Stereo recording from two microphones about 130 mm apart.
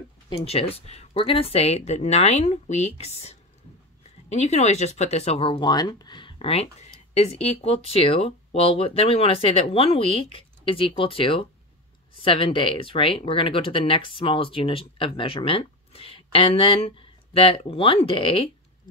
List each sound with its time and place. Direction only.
0.5 s speech: 50° left (ahead or behind)